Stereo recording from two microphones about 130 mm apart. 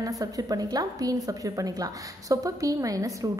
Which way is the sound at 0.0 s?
30° right (ahead or behind).